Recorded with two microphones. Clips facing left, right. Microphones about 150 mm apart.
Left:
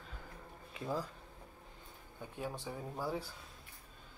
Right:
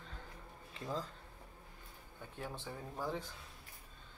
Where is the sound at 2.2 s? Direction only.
15° left (ahead or behind).